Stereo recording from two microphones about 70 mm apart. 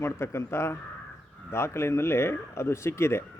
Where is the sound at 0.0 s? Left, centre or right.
Left.